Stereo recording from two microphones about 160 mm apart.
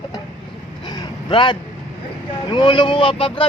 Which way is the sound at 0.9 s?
25° left (ahead or behind).